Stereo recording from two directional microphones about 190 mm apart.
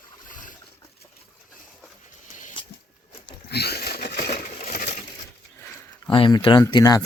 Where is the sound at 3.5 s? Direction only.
55° left (ahead or behind).